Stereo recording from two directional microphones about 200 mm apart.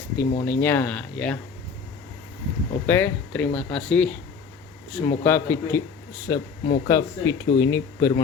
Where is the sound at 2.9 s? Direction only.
10° left (ahead or behind).